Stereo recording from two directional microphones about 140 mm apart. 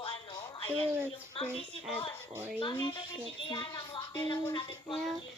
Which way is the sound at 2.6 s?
35° left (ahead or behind).